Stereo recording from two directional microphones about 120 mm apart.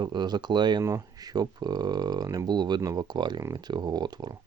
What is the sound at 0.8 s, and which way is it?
Speech, 25° right (ahead or behind).